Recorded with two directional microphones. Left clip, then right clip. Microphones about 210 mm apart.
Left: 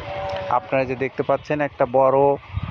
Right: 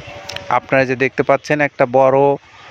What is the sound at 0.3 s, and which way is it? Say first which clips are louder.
Speech: right 6 dB; 55° right (ahead or behind).